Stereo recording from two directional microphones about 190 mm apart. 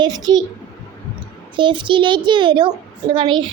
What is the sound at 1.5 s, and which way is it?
A child's voice, 25° right (ahead or behind).